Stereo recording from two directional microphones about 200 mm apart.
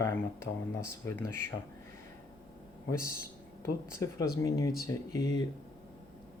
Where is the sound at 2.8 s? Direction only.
15° left (ahead or behind).